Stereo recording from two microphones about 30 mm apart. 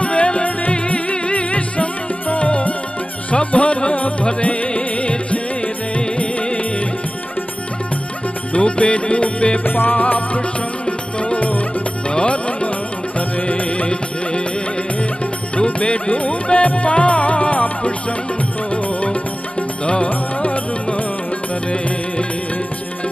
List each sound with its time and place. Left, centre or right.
0.0 s music: left
8.5 s music: left
9.7 s music: left
10.9 s music: left
11.3 s music: left
12.1 s music: left
15.5 s music: left
19.8 s music: left
20.4 s music: left